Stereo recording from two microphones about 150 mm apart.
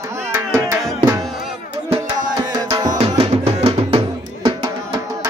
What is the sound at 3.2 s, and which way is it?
Music, 40° right (ahead or behind).